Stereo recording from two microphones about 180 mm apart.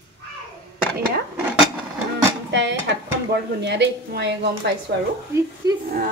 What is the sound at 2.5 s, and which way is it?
Speech, 75° right (ahead or behind).